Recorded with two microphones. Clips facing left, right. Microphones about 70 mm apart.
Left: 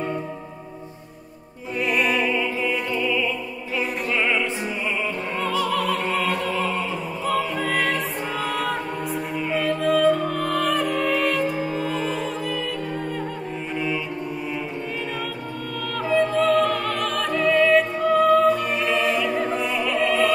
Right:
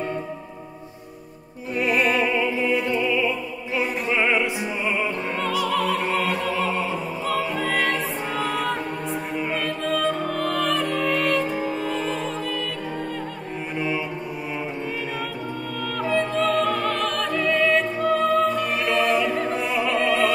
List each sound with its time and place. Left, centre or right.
1.8 s music: centre
2.3 s music: centre
3.7 s opera: centre
6.6 s opera: centre
7.2 s music: centre
13.7 s music: centre
16.0 s music: centre